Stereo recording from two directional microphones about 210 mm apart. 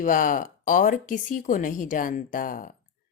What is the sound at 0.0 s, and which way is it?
Speech, 40° left (ahead or behind).